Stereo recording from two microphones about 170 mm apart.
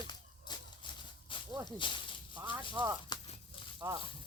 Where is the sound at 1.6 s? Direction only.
30° left (ahead or behind).